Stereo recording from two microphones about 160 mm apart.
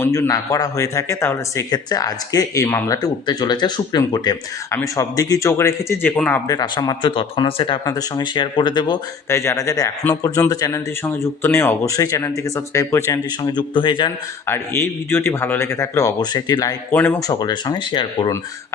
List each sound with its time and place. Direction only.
0.0 s speech: 20° left (ahead or behind)
6.5 s speech: 25° left (ahead or behind)
9.3 s speech: 20° left (ahead or behind)
14.4 s a man's voice: 15° left (ahead or behind)